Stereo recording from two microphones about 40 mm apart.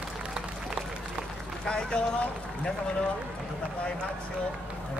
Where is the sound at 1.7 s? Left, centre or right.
Left.